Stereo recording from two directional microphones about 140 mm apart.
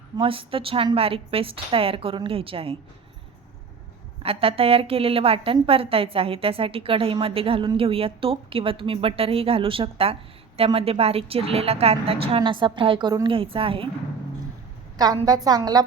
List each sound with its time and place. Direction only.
0.2 s a woman's voice: 40° right (ahead or behind)
4.2 s a woman's voice: 45° right (ahead or behind)
14.9 s a woman's voice: 25° right (ahead or behind)